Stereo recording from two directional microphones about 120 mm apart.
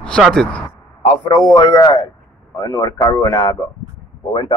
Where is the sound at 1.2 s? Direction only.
40° left (ahead or behind).